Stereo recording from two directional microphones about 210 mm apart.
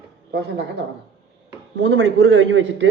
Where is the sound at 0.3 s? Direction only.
55° right (ahead or behind).